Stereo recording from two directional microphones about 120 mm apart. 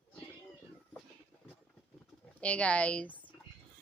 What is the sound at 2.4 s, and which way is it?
Speech, 10° left (ahead or behind).